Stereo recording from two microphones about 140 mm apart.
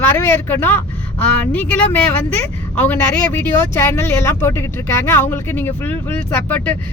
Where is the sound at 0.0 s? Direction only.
15° left (ahead or behind).